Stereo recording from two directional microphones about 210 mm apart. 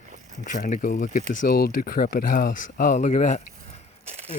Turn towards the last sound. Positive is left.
turn(degrees=-30)  # may be behind; listen again after turning